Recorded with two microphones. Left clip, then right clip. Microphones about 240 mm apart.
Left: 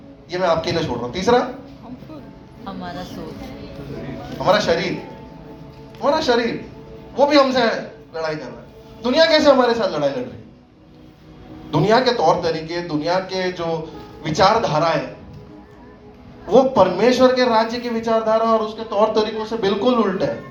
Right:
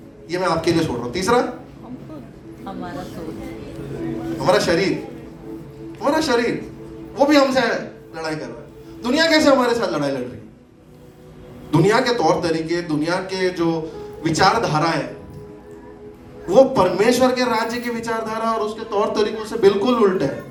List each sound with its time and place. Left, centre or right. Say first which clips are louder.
0.3 s a man's voice: left 1 dB; right
4.4 s a man's voice: even; right
6.0 s a man's voice: left 1 dB; right
9.0 s a man's voice: left 2 dB; right
11.7 s a man's voice: left 1 dB; right
16.5 s a man's voice: even; right